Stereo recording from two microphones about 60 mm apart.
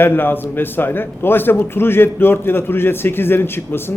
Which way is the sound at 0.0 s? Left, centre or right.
Left.